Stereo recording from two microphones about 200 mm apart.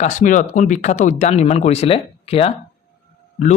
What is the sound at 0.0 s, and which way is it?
Speech, 40° left (ahead or behind).